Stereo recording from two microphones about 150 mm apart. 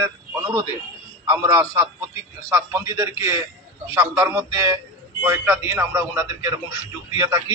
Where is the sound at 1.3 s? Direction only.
20° right (ahead or behind).